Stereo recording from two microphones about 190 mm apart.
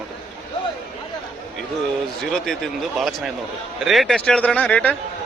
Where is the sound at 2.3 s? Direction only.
Centre (ahead or behind).